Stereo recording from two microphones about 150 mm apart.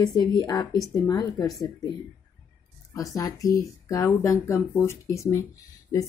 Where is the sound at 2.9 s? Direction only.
25° left (ahead or behind).